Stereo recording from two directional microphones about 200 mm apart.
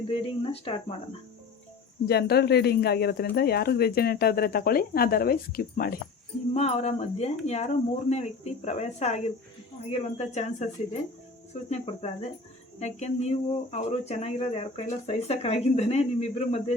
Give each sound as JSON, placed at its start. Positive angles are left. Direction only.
{"t": 0.1, "sound": "speech", "side_deg": 30}
{"t": 2.0, "sound": "speech", "side_deg": 55}
{"t": 6.5, "sound": "speech", "side_deg": 35}
{"t": 11.7, "sound": "speech", "side_deg": 30}